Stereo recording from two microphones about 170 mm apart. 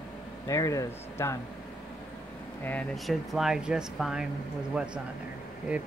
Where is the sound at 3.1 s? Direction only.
Centre (ahead or behind).